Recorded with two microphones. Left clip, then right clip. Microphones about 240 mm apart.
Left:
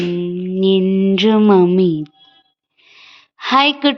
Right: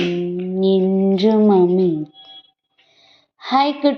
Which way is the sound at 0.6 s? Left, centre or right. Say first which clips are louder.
Left 2 dB; left.